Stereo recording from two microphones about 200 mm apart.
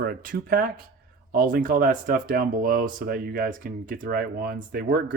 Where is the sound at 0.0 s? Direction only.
45° right (ahead or behind).